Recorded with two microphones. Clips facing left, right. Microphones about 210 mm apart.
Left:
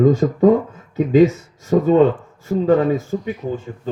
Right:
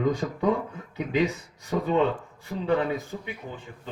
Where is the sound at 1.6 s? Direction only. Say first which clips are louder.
Left 10 dB; 40° left (ahead or behind).